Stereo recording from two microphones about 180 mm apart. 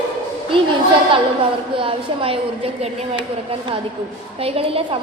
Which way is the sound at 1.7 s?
30° right (ahead or behind).